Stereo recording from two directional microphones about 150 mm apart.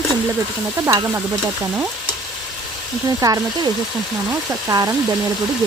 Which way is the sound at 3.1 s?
25° right (ahead or behind).